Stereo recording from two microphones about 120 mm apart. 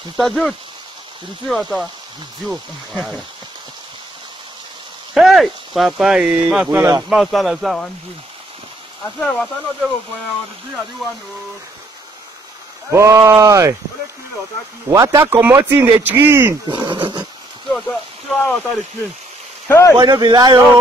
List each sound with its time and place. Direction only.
0.2 s speech: centre (ahead or behind)
5.1 s speech: centre (ahead or behind)
6.8 s speech: 30° right (ahead or behind)
7.1 s speech: centre (ahead or behind)
9.2 s speech: 10° left (ahead or behind)
11.0 s speech: centre (ahead or behind)
12.9 s speech: 25° right (ahead or behind)
14.9 s speech: 30° right (ahead or behind)
16.6 s speech: 40° right (ahead or behind)
17.6 s speech: 5° left (ahead or behind)
20.0 s speech: 35° right (ahead or behind)